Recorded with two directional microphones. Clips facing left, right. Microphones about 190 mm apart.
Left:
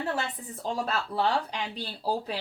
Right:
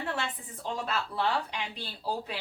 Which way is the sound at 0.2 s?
40° left (ahead or behind).